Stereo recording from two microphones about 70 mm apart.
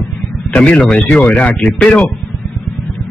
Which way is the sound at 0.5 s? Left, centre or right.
Centre.